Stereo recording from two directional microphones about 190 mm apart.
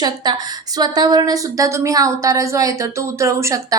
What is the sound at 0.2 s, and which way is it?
A woman's voice, 20° right (ahead or behind).